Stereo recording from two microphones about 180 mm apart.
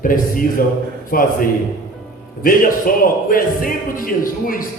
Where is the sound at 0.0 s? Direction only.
50° left (ahead or behind).